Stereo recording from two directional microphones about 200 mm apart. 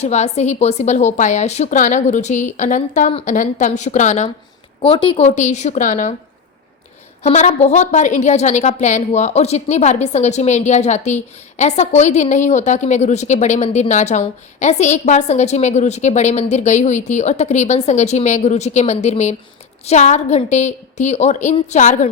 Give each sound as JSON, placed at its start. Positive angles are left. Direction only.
{"t": 0.0, "sound": "a woman's voice", "side_deg": 35}
{"t": 7.2, "sound": "a woman's voice", "side_deg": 35}